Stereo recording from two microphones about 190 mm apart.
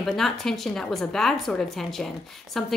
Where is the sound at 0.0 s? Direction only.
Centre (ahead or behind).